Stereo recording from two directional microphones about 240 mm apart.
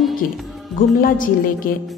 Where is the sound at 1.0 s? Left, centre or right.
Left.